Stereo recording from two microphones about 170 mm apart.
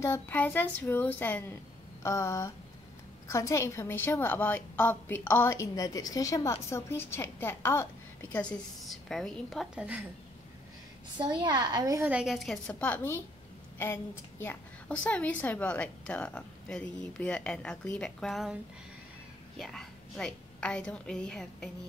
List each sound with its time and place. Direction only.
0.0 s a woman's voice: 10° left (ahead or behind); by 10.0 s 10° right (ahead or behind)
11.1 s a woman's voice: 25° right (ahead or behind)
12.1 s a woman's voice: 5° right (ahead or behind)
14.4 s a woman's voice: 10° left (ahead or behind)
19.6 s a woman's voice: centre (ahead or behind)